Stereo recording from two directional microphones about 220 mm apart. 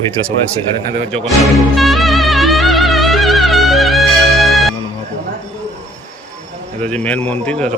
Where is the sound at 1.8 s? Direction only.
Centre (ahead or behind).